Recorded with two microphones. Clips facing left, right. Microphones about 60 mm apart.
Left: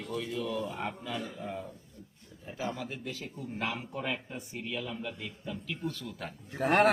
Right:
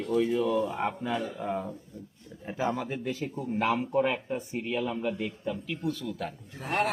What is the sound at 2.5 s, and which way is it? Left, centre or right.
Speech, right.